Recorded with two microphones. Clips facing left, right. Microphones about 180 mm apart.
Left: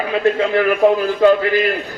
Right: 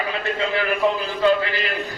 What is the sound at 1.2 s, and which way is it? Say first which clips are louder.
Speech: left 5 dB; 50° left (ahead or behind).